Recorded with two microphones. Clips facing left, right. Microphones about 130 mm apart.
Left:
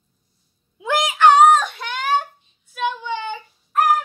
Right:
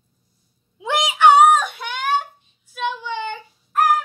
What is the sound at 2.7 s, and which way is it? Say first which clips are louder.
Child singing: left 1 dB; 5° left (ahead or behind).